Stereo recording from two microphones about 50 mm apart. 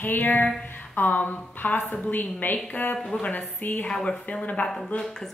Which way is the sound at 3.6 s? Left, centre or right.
Left.